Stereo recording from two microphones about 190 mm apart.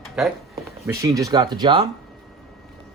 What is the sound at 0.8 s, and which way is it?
Speech, 15° right (ahead or behind).